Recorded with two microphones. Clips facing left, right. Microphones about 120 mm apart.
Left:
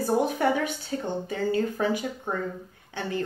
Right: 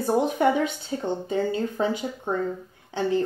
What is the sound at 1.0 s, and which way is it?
Speech, 25° right (ahead or behind).